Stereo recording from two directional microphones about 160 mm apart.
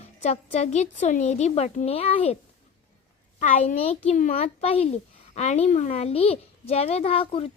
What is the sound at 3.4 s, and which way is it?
Speech, 50° left (ahead or behind).